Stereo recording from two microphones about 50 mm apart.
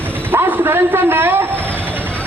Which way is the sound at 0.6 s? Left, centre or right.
Right.